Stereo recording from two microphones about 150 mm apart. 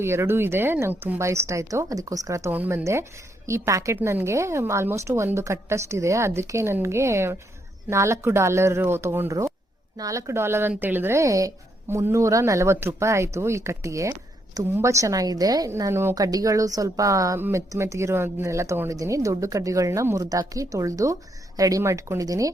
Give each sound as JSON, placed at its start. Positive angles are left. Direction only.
{"t": 0.0, "sound": "a woman's voice", "side_deg": -15}